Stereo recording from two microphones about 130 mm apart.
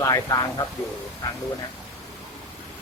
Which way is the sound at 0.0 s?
25° left (ahead or behind).